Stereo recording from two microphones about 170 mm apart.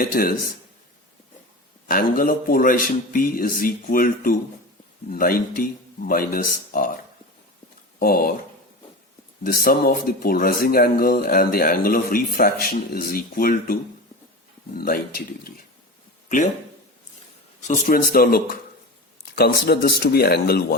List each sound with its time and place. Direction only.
0.0 s speech: 60° left (ahead or behind)
1.9 s speech: 55° left (ahead or behind)
9.4 s speech: 60° left (ahead or behind)
14.8 s speech: 60° left (ahead or behind)
17.6 s speech: 50° left (ahead or behind); by 20.7 s 70° left (ahead or behind)